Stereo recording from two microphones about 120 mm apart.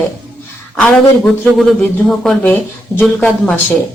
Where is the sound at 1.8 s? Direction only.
5° left (ahead or behind).